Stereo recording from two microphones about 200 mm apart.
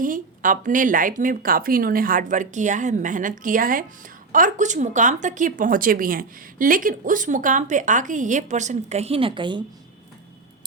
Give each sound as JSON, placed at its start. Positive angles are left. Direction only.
{"t": 0.0, "sound": "speech", "side_deg": -40}